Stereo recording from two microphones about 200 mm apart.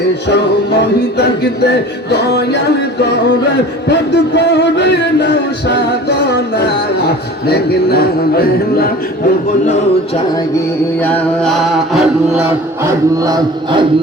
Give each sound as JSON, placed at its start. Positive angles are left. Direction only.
{"t": 0.8, "sound": "music", "side_deg": 55}
{"t": 3.8, "sound": "music", "side_deg": 55}
{"t": 7.4, "sound": "music", "side_deg": 50}
{"t": 11.0, "sound": "music", "side_deg": 5}
{"t": 12.8, "sound": "chant", "side_deg": -20}